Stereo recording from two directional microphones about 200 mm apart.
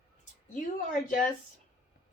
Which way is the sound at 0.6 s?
40° left (ahead or behind).